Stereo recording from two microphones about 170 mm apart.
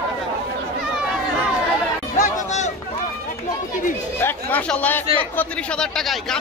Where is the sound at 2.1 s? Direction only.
50° left (ahead or behind).